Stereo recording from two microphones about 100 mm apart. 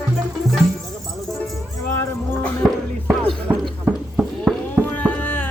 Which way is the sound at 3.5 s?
15° right (ahead or behind).